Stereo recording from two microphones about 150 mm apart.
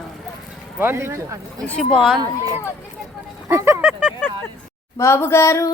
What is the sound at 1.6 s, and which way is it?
Speech, 5° left (ahead or behind).